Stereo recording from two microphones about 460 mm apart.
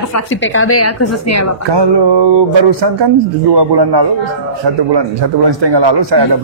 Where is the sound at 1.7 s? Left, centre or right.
Right.